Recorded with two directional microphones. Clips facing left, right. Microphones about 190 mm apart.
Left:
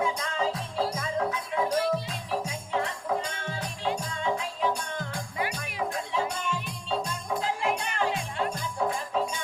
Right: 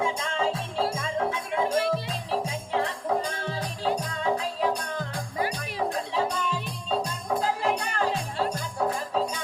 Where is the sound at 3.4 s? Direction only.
35° right (ahead or behind).